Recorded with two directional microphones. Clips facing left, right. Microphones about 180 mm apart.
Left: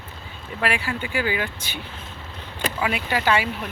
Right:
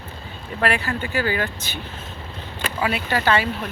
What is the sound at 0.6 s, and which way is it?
Speech, 10° left (ahead or behind).